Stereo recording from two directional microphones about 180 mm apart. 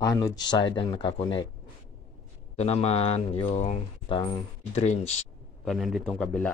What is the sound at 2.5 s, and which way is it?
Speech, 35° left (ahead or behind).